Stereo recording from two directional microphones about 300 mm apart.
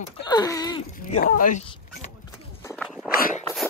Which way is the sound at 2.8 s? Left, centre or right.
Centre.